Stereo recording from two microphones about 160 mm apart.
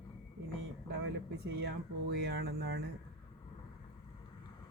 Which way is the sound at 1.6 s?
90° right.